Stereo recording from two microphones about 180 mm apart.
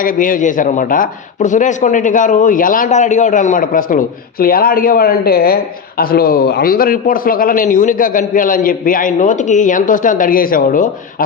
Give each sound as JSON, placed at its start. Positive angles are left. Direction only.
{"t": 0.0, "sound": "speech", "side_deg": 50}